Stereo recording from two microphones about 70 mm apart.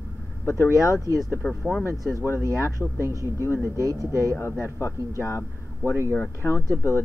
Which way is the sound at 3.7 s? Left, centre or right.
Right.